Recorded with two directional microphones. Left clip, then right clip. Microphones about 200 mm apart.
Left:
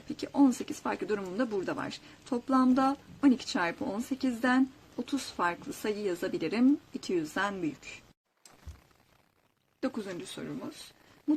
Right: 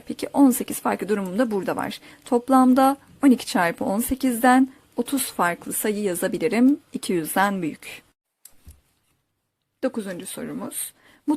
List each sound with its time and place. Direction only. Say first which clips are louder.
0.1 s speech: right 8 dB; 35° right (ahead or behind)
9.8 s speech: right 8 dB; 20° right (ahead or behind)